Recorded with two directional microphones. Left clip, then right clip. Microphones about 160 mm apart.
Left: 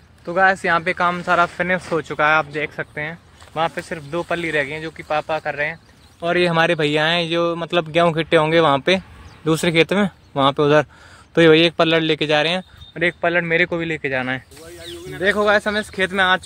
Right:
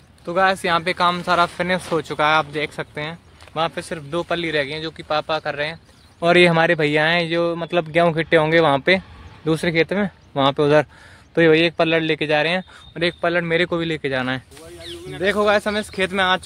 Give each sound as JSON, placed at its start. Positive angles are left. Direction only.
{"t": 0.2, "sound": "speech", "side_deg": -5}
{"t": 3.5, "sound": "speech", "side_deg": -5}
{"t": 6.1, "sound": "speech", "side_deg": -50}
{"t": 6.5, "sound": "speech", "side_deg": -5}
{"t": 10.3, "sound": "speech", "side_deg": 0}
{"t": 12.9, "sound": "speech", "side_deg": -10}
{"t": 15.2, "sound": "speech", "side_deg": -5}